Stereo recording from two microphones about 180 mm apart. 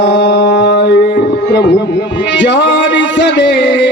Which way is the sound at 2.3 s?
85° left.